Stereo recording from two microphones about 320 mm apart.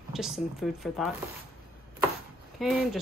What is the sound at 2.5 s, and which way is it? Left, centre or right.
Speech, centre.